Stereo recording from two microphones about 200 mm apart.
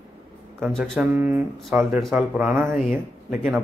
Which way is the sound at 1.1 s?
10° right (ahead or behind).